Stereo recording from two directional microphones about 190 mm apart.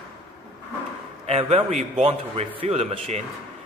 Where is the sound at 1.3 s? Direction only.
30° right (ahead or behind).